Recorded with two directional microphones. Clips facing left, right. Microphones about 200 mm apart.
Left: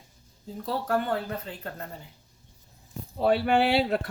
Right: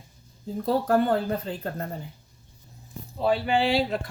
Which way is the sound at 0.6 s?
40° right (ahead or behind).